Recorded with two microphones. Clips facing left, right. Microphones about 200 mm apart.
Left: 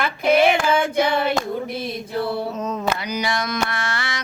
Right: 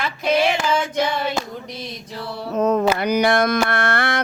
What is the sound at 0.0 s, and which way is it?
Child singing, 55° left (ahead or behind).